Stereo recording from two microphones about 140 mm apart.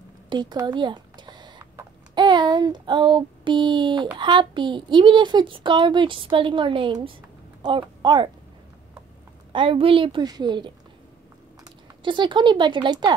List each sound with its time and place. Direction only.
0.3 s a sound: 30° right (ahead or behind)
4.2 s a woman's voice: 35° right (ahead or behind)
9.5 s a woman's voice: 40° right (ahead or behind)